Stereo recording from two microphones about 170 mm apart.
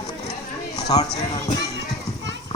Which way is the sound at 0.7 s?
20° left (ahead or behind).